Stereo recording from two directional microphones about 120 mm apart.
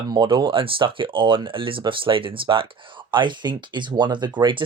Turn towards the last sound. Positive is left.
turn(degrees=-40)  # may be behind; listen again after turning